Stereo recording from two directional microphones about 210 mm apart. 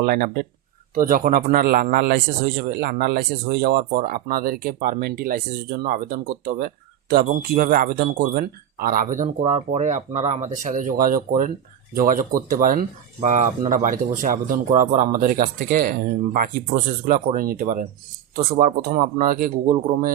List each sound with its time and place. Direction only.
0.0 s speech: 45° right (ahead or behind)